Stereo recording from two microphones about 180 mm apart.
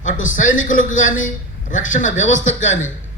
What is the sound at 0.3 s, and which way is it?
A man's voice, 45° left (ahead or behind).